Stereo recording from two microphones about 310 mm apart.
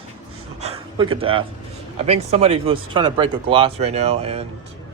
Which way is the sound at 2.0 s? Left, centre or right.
Centre.